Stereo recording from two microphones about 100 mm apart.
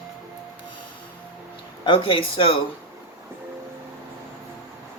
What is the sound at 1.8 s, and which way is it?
Speech, 55° left (ahead or behind).